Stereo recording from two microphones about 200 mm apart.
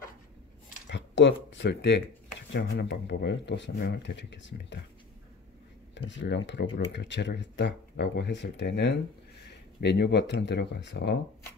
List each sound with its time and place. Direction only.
0.8 s speech: 65° left (ahead or behind)
5.9 s speech: 65° left (ahead or behind)